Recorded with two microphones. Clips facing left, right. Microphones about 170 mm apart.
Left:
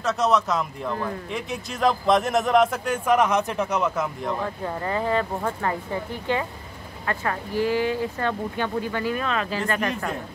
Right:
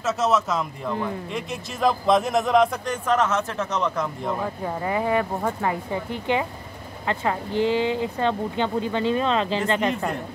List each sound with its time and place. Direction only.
0.0 s a man's voice: centre (ahead or behind); by 10.0 s 20° right (ahead or behind)